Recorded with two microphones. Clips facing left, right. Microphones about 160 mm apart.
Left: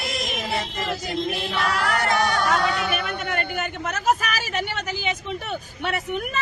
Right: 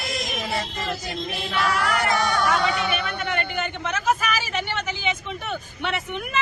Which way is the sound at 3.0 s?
45° left (ahead or behind).